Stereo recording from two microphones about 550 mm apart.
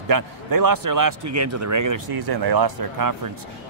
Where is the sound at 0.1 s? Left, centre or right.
Right.